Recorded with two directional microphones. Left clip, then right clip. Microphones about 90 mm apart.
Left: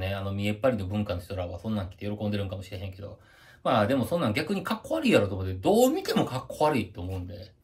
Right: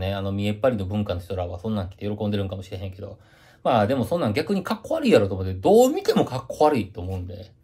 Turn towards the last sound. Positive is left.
turn(degrees=-30)  # may be behind; listen again after turning